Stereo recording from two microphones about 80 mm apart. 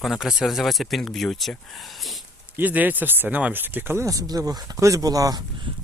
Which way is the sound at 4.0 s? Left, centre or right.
Right.